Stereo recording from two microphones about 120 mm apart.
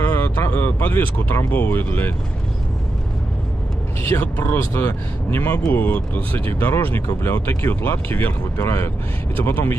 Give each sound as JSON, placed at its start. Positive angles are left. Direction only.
{"t": 0.0, "sound": "speech", "side_deg": 15}
{"t": 4.0, "sound": "speech", "side_deg": 15}